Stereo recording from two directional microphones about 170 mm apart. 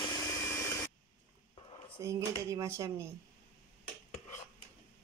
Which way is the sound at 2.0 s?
15° right (ahead or behind).